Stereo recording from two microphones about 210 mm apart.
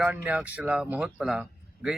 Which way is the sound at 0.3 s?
5° right (ahead or behind).